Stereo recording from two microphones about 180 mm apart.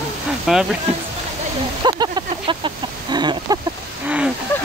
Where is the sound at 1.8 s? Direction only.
25° right (ahead or behind).